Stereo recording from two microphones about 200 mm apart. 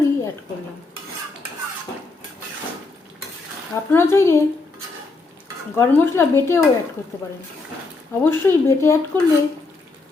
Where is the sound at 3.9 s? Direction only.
15° left (ahead or behind).